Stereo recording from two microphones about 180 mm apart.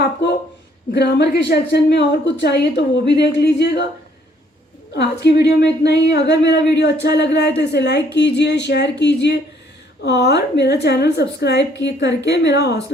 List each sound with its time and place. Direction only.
0.9 s speech: 65° left (ahead or behind)
4.9 s speech: 70° left (ahead or behind)